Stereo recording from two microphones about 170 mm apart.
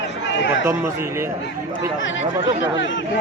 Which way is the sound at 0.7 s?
15° right (ahead or behind).